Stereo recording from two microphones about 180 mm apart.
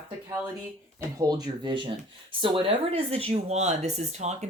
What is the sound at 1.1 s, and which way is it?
Speech, 25° right (ahead or behind).